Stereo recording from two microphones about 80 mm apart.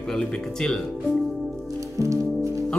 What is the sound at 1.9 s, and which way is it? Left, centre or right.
Music, right.